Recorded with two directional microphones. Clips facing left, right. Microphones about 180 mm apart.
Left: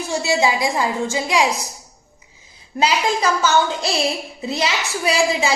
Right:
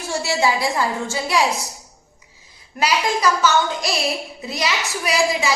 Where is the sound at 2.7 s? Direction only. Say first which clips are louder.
Left 1 dB; 25° left (ahead or behind).